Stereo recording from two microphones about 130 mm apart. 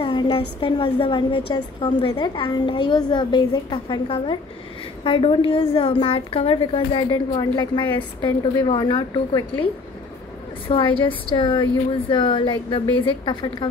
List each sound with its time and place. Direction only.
0.0 s a woman's voice: 40° left (ahead or behind)
11.0 s a woman's voice: 40° left (ahead or behind)